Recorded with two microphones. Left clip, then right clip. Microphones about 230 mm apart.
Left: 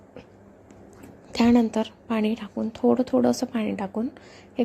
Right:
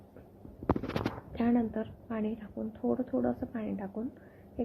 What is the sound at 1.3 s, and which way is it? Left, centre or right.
A woman's voice, left.